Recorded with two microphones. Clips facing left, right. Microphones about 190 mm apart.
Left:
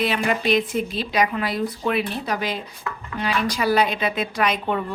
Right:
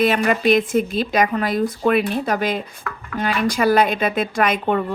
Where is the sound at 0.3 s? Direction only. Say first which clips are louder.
Right 4 dB; 50° right (ahead or behind).